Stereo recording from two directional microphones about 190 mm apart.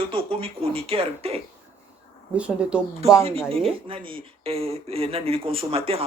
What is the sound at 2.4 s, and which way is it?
Speech, 5° right (ahead or behind).